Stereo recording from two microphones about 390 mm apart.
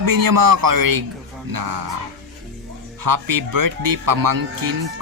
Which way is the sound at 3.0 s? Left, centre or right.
Right.